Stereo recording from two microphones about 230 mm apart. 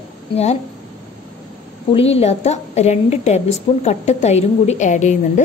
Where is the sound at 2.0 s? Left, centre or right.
Left.